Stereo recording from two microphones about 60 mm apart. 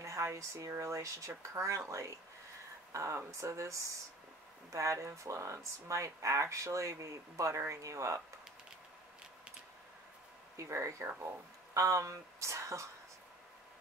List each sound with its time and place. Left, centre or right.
0.0 s speech: right
10.6 s speech: right